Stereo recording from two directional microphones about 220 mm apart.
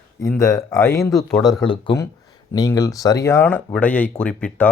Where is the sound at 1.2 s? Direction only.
Centre (ahead or behind).